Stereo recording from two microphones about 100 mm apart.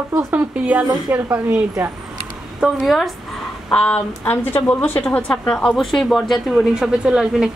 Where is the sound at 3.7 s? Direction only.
10° left (ahead or behind).